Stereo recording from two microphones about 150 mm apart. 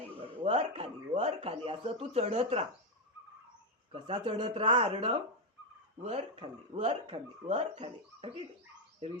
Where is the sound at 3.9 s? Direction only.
35° right (ahead or behind).